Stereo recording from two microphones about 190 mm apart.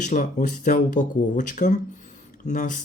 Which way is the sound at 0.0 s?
45° left (ahead or behind).